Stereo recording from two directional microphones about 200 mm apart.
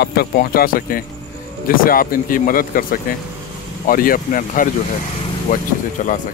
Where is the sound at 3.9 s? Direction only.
45° left (ahead or behind).